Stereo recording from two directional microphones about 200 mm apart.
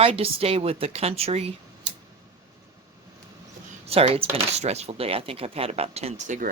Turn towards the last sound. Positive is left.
turn(degrees=-35)  # may be behind; listen again after turning